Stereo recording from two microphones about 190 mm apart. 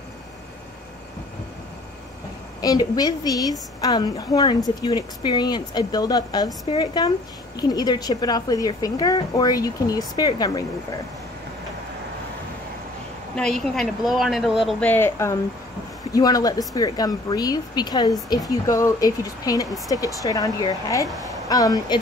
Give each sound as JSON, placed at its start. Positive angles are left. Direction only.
{"t": 2.6, "sound": "speech", "side_deg": 20}
{"t": 13.4, "sound": "a woman's voice", "side_deg": 0}